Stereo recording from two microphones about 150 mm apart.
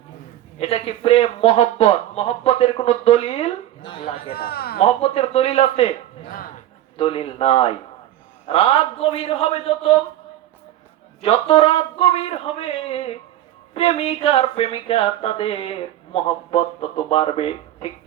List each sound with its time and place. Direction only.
0.6 s speech: 40° left (ahead or behind)
4.3 s speech: 90° left
4.8 s speech: 40° left (ahead or behind)
6.9 s speech: 40° left (ahead or behind)
11.2 s speech: 40° left (ahead or behind)